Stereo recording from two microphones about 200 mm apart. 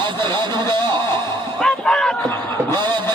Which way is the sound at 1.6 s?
5° left (ahead or behind).